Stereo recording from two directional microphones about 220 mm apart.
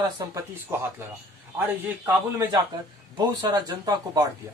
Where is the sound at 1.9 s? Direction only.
10° right (ahead or behind).